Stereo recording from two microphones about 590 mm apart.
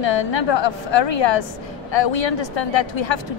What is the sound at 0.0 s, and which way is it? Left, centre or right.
Speech, left.